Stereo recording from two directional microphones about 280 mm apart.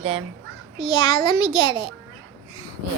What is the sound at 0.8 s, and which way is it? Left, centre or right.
A child's voice, centre.